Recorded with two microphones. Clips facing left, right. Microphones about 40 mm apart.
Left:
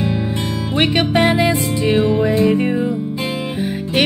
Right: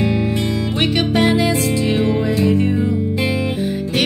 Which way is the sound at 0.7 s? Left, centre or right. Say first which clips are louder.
Left 3 dB; centre.